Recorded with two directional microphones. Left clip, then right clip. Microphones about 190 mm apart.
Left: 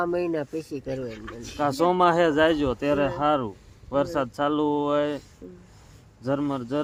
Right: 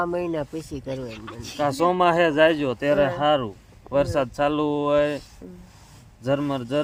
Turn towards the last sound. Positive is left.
turn(degrees=-15)  # may be behind; listen again after turning